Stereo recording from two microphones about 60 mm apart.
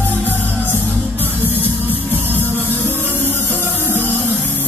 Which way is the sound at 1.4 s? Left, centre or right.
Right.